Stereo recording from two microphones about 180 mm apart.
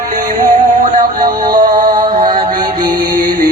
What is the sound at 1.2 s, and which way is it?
Music, 25° right (ahead or behind).